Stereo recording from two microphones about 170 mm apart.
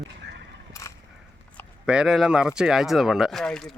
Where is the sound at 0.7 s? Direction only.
15° left (ahead or behind).